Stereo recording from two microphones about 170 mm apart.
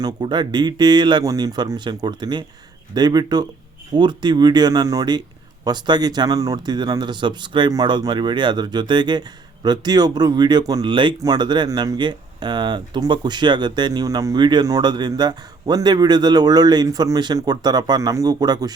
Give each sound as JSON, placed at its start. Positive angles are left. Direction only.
{"t": 0.0, "sound": "speech", "side_deg": -25}